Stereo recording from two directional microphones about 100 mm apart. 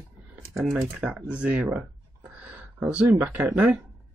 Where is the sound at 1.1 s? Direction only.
15° right (ahead or behind).